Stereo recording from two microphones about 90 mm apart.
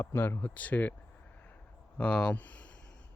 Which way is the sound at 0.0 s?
25° left (ahead or behind).